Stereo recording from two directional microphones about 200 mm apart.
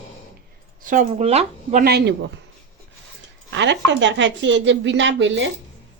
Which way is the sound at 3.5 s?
65° right (ahead or behind).